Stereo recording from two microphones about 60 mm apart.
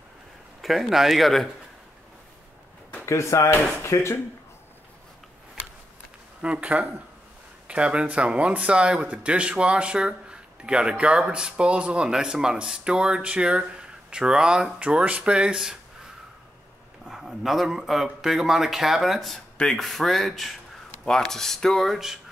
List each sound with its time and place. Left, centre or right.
0.6 s a man's voice: centre
3.1 s speech: left
6.4 s speech: centre
17.0 s a man's voice: centre